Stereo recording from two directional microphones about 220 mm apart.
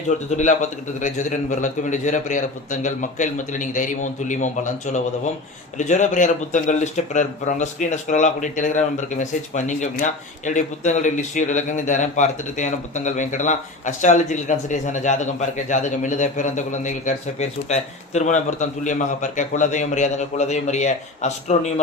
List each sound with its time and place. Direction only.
0.3 s speech: 35° left (ahead or behind)